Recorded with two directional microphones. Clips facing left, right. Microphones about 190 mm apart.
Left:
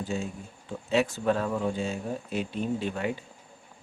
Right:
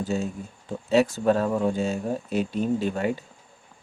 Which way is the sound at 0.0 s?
40° right (ahead or behind).